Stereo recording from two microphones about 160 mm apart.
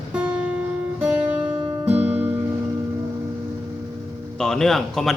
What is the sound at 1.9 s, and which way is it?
Music, 10° right (ahead or behind).